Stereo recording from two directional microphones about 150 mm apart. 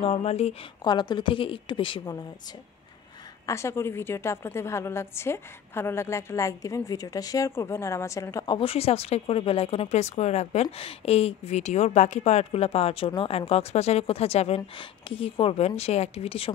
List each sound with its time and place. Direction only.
0.0 s speech: 45° left (ahead or behind)
0.8 s a woman's voice: 30° left (ahead or behind)
3.4 s a woman's voice: 20° left (ahead or behind)
8.5 s speech: 40° left (ahead or behind)